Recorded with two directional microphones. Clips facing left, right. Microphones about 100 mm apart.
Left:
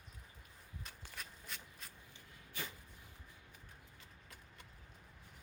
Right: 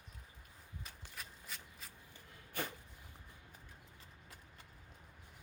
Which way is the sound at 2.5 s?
55° right (ahead or behind).